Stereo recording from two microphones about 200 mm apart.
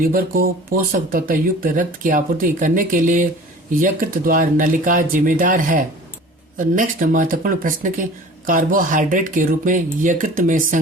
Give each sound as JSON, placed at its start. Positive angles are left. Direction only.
{"t": 0.0, "sound": "speech", "side_deg": -45}